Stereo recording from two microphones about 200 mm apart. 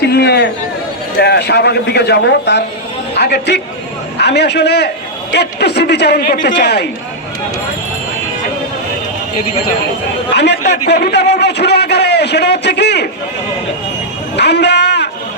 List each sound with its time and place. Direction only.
0.0 s a man's voice: 55° left (ahead or behind)
10.3 s a man's voice: 60° left (ahead or behind)
14.3 s speech: 60° left (ahead or behind)